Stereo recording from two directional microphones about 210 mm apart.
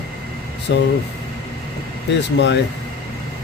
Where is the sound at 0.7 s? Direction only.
55° left (ahead or behind).